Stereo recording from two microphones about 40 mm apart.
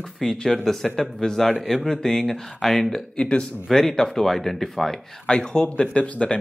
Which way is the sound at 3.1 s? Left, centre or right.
Left.